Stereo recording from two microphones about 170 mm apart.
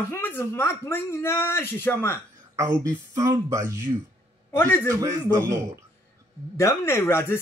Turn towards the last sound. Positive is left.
turn(degrees=15)  # may be behind; listen again after turning